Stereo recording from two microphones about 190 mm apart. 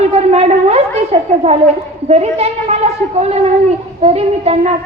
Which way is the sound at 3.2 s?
35° right (ahead or behind).